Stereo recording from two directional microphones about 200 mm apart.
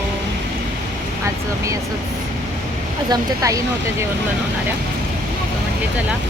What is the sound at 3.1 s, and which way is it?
Speech, 15° right (ahead or behind).